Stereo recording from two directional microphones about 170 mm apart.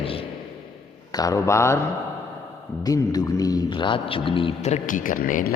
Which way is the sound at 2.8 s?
20° left (ahead or behind).